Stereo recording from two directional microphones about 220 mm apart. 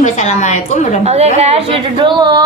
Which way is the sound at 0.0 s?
35° left (ahead or behind).